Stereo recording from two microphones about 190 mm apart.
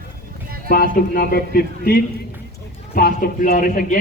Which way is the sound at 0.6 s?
50° left (ahead or behind).